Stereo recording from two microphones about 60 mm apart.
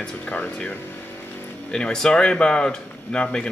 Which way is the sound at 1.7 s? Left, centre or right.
Centre.